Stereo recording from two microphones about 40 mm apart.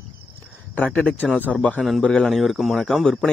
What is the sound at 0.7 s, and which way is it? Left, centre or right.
Speech, left.